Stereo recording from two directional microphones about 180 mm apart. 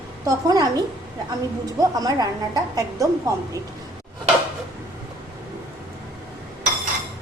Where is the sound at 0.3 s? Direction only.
20° right (ahead or behind).